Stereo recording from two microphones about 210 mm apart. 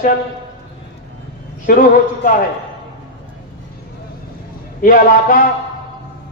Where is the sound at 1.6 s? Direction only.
40° left (ahead or behind).